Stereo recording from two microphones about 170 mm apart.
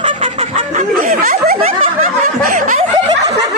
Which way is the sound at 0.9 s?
55° right (ahead or behind).